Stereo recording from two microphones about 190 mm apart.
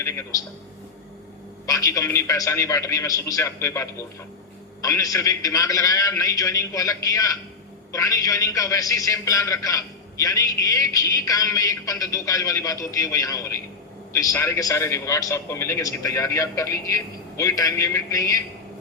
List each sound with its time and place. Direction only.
0.0 s a man's voice: 15° left (ahead or behind)
1.6 s a man's voice: 15° left (ahead or behind)